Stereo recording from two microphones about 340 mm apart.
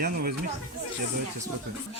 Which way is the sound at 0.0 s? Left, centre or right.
Right.